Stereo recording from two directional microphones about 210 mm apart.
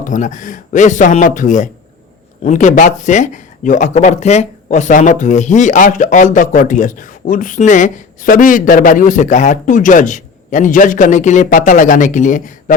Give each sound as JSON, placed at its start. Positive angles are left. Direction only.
{"t": 0.1, "sound": "speech", "side_deg": 35}